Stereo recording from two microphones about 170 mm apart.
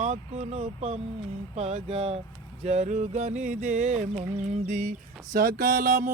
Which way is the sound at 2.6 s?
40° right (ahead or behind).